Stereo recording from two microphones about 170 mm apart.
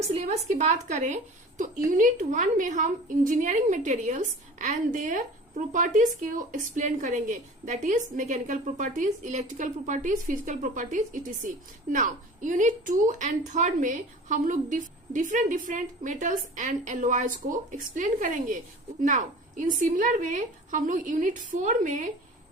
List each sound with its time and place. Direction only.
0.0 s a woman's voice: 40° right (ahead or behind)